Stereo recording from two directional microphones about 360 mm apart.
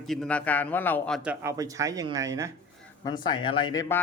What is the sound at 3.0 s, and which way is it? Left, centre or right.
Speech, centre.